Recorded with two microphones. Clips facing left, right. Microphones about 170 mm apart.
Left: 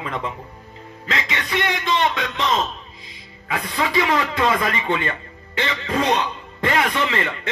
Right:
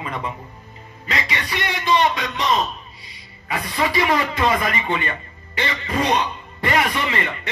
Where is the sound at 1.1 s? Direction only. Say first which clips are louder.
Even; 90° left.